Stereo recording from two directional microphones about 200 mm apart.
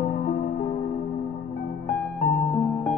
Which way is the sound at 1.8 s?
10° left (ahead or behind).